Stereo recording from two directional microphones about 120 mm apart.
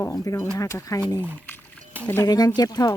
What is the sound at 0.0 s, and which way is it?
Speech, 25° left (ahead or behind).